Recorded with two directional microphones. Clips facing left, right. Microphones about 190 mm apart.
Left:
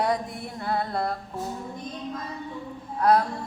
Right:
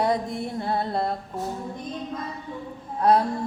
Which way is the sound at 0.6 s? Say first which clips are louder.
Even; 25° right (ahead or behind).